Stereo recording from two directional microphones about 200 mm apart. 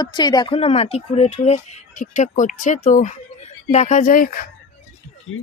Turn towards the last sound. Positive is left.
turn(degrees=45)  # may be behind; listen again after turning